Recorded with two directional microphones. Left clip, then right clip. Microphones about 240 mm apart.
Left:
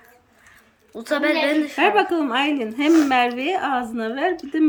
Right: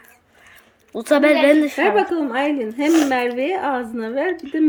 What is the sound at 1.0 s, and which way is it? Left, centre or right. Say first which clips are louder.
Speech: right 6 dB; right.